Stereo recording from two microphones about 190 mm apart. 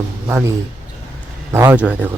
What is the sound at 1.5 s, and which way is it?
Speech, 10° right (ahead or behind).